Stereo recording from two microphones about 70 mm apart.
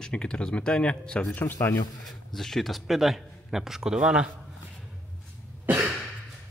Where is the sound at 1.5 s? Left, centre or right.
Left.